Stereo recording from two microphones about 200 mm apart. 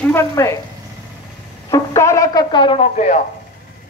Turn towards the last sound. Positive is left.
turn(degrees=35)  # may be behind; listen again after turning